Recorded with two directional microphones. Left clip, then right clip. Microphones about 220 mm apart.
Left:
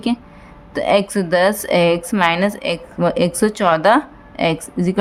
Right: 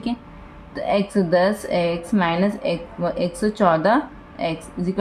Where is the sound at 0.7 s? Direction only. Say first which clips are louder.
Left 6 dB; 40° left (ahead or behind).